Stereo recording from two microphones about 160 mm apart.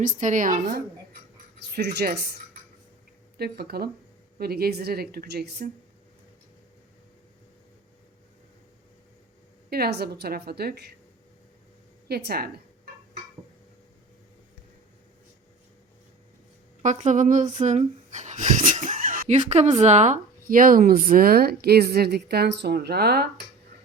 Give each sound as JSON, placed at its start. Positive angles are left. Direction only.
{"t": 0.0, "sound": "a woman's voice", "side_deg": -50}
{"t": 1.5, "sound": "speech", "side_deg": -90}
{"t": 3.3, "sound": "speech", "side_deg": -80}
{"t": 9.6, "sound": "a woman's voice", "side_deg": -75}
{"t": 12.0, "sound": "speech", "side_deg": -80}
{"t": 16.8, "sound": "a woman's voice", "side_deg": -50}
{"t": 17.6, "sound": "a sound", "side_deg": -50}
{"t": 19.3, "sound": "speech", "side_deg": -45}